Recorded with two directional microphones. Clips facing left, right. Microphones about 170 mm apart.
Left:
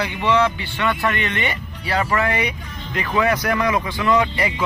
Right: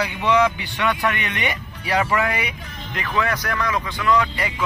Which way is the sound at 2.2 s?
5° right (ahead or behind).